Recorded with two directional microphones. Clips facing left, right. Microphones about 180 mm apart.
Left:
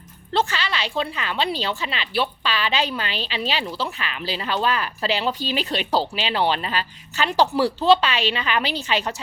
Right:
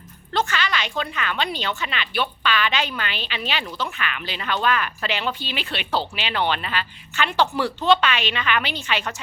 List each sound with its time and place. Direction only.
0.3 s a woman's voice: 30° left (ahead or behind)